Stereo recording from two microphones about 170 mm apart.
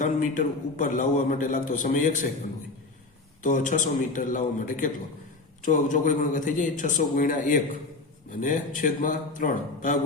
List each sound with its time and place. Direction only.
0.0 s a man's voice: 50° left (ahead or behind)
3.4 s a man's voice: 50° left (ahead or behind)